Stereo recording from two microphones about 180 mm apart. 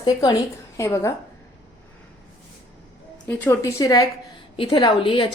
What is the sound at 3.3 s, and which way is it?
A woman's voice, 10° left (ahead or behind).